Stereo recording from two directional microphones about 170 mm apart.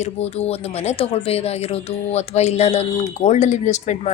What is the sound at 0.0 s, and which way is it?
Speech, 40° left (ahead or behind).